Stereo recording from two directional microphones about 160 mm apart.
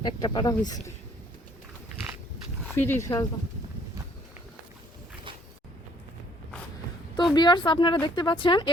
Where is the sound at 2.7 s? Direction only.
15° left (ahead or behind).